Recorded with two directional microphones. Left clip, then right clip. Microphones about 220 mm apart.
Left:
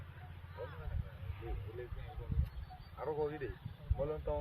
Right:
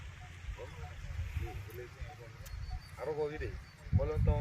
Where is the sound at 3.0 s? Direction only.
60° right (ahead or behind).